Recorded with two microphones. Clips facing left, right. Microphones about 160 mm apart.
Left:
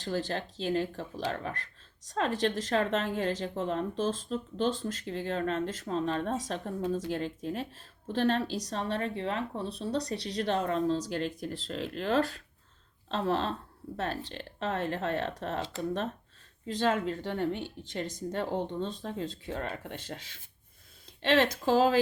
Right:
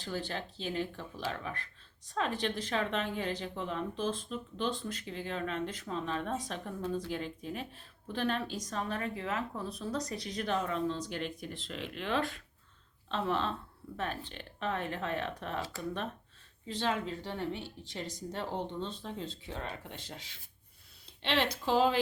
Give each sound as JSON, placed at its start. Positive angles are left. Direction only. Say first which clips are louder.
{"t": 0.0, "sound": "speech", "louder": "left 5 dB", "side_deg": 40}
{"t": 15.6, "sound": "speech", "louder": "left 5 dB", "side_deg": 25}
{"t": 16.6, "sound": "speech", "louder": "left 5 dB", "side_deg": 45}